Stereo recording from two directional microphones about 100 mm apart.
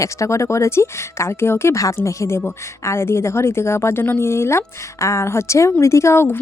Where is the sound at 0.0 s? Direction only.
30° left (ahead or behind).